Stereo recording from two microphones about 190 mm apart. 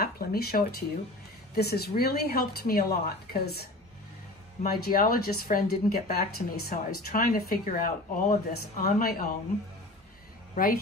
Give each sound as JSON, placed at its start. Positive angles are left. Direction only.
{"t": 0.0, "sound": "speech", "side_deg": 55}
{"t": 4.6, "sound": "speech", "side_deg": 50}
{"t": 10.5, "sound": "a woman's voice", "side_deg": 50}